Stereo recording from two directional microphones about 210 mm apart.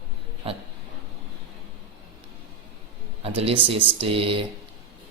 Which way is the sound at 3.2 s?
25° right (ahead or behind).